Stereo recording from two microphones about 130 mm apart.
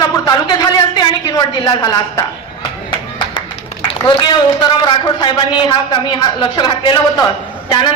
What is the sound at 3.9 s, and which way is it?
A woman's voice, 35° left (ahead or behind).